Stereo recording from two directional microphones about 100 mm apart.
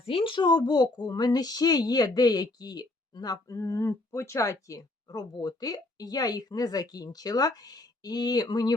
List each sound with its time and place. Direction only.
0.0 s speech: 65° left (ahead or behind); by 8.7 s 40° left (ahead or behind)